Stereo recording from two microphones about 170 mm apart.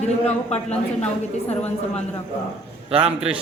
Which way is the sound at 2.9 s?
35° right (ahead or behind).